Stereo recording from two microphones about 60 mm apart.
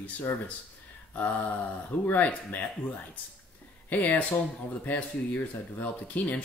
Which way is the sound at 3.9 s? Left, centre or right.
Left.